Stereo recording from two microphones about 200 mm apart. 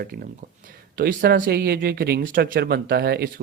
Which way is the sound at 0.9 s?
45° right (ahead or behind).